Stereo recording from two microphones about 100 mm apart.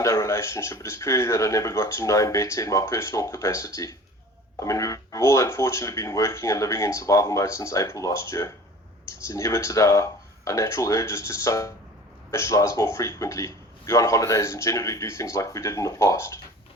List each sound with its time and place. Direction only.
0.0 s a man's voice: 30° left (ahead or behind)